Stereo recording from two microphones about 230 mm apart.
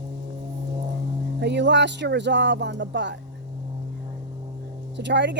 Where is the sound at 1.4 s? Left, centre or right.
Right.